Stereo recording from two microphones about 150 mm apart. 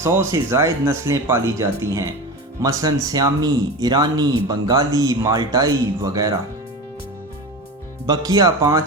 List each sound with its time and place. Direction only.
0.0 s speech: 20° right (ahead or behind)
8.0 s speech: 25° right (ahead or behind)